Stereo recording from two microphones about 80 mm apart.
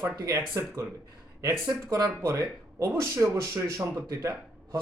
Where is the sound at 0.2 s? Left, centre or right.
Right.